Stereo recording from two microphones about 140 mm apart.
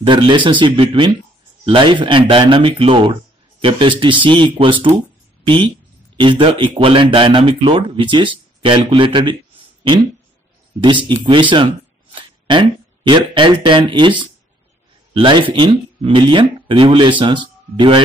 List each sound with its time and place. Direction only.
0.0 s speech: 35° right (ahead or behind)
6.1 s speech: 35° right (ahead or behind)
10.8 s speech: 35° right (ahead or behind)